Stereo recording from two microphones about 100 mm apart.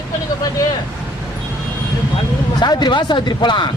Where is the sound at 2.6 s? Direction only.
45° left (ahead or behind).